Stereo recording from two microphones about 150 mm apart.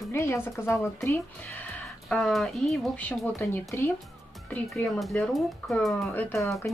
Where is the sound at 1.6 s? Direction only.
5° left (ahead or behind).